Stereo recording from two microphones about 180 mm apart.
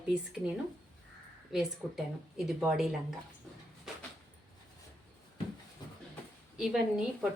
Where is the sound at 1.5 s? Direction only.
Centre (ahead or behind).